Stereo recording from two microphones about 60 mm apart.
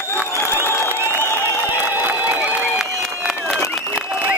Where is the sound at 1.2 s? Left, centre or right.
Left.